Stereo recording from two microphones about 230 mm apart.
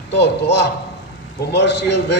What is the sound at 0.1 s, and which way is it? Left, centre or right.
A man's voice, left.